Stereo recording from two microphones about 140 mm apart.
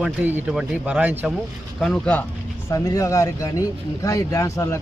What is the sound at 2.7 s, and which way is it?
Speech, 25° left (ahead or behind).